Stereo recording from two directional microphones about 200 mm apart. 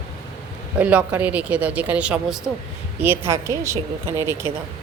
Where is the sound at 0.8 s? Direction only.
5° right (ahead or behind).